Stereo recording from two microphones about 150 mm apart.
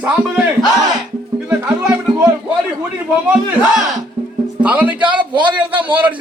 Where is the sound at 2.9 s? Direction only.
5° right (ahead or behind).